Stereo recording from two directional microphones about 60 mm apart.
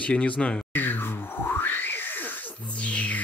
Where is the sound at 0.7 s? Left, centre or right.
Left.